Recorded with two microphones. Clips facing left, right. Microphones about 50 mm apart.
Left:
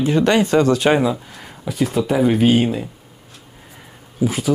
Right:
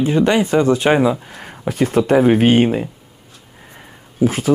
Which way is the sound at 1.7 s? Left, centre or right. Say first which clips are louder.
Right 4 dB; right.